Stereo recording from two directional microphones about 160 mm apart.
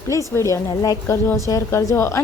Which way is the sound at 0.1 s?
20° left (ahead or behind).